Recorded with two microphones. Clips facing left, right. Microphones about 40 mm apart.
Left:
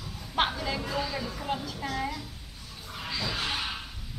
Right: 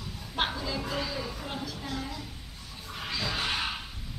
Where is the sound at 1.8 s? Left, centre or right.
Left.